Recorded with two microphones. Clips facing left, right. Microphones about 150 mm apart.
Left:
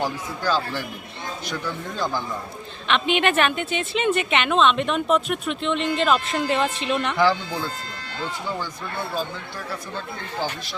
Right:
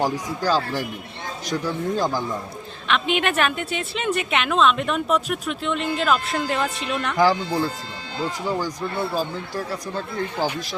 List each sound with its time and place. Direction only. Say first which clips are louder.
0.0 s speech: right 3 dB; 40° right (ahead or behind)
2.8 s a woman's voice: left 1 dB; centre (ahead or behind)
7.2 s speech: right 4 dB; 40° right (ahead or behind)